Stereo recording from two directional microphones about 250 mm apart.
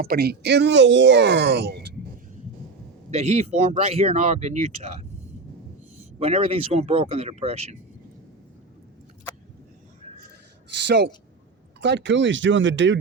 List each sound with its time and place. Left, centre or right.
0.0 s speech: right
3.1 s speech: right
6.1 s speech: right
10.8 s speech: right